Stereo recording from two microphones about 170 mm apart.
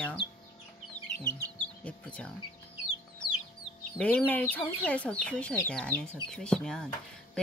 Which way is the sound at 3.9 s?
5° left (ahead or behind).